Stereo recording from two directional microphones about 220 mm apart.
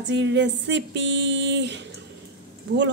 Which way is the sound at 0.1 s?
55° right (ahead or behind).